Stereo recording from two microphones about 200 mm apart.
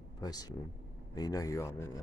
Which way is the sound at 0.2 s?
20° left (ahead or behind).